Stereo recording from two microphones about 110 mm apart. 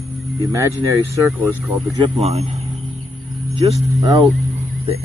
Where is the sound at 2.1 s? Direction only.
70° right (ahead or behind).